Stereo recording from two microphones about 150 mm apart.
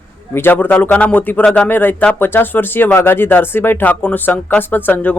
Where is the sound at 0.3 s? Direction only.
15° left (ahead or behind).